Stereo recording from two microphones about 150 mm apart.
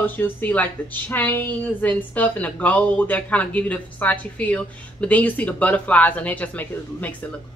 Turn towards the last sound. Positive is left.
turn(degrees=10)  # may be behind; listen again after turning